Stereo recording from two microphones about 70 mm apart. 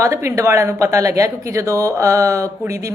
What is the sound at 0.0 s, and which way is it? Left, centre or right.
Speech, right.